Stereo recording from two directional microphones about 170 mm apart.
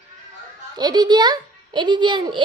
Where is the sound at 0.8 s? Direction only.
25° right (ahead or behind).